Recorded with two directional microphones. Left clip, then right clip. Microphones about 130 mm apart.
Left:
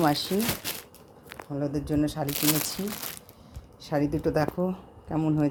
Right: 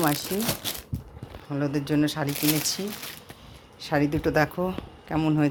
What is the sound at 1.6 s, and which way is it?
Speech, centre (ahead or behind).